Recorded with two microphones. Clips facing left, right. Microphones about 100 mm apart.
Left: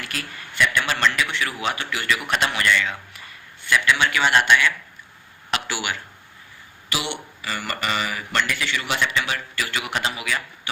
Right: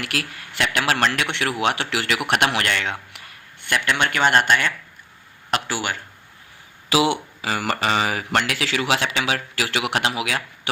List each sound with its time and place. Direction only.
0.0 s speech: 80° right
1.0 s a man's voice: 65° right (ahead or behind); by 6.0 s 40° right (ahead or behind)
7.4 s speech: 90° right